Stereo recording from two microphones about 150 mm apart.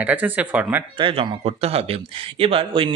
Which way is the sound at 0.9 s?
35° right (ahead or behind).